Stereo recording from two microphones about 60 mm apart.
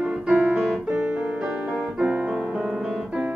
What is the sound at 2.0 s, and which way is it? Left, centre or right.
Music, right.